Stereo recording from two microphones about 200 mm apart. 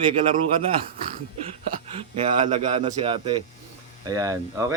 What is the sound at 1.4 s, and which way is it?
Speech, 30° right (ahead or behind).